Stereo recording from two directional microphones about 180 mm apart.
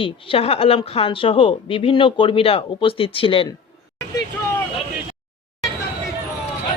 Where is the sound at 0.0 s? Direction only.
30° left (ahead or behind).